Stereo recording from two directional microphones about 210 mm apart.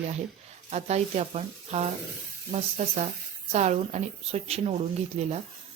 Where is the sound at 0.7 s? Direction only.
30° right (ahead or behind).